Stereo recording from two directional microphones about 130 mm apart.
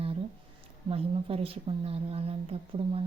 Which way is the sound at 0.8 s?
50° right (ahead or behind).